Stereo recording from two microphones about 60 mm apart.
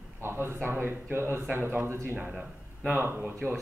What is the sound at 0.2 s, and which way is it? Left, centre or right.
Speech, right.